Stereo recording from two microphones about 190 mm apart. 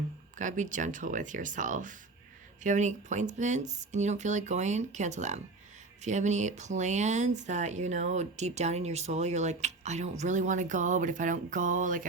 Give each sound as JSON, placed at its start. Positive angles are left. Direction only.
{"t": 0.3, "sound": "speech", "side_deg": -40}